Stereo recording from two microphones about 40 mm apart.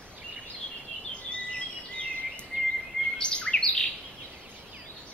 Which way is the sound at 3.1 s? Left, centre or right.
Left.